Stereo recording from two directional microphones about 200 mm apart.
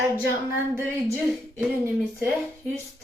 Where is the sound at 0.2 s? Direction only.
10° right (ahead or behind).